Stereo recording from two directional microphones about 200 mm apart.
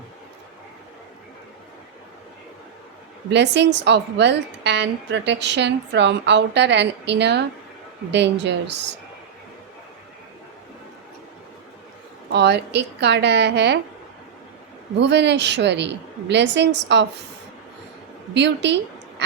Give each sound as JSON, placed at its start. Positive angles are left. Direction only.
{"t": 3.2, "sound": "a woman's voice", "side_deg": -60}
{"t": 12.3, "sound": "a woman's voice", "side_deg": -55}
{"t": 14.9, "sound": "a woman's voice", "side_deg": -60}
{"t": 18.3, "sound": "a woman's voice", "side_deg": -60}